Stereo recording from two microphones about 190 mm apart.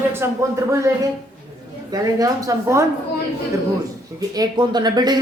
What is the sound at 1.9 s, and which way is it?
Speech, 20° right (ahead or behind).